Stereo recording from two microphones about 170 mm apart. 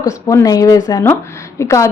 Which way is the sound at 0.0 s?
20° left (ahead or behind).